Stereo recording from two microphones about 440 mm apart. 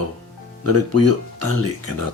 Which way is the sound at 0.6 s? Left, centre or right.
Right.